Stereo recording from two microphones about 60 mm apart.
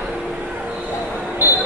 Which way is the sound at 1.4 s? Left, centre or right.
Right.